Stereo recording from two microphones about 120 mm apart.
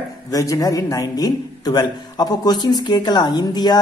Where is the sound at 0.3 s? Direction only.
30° left (ahead or behind).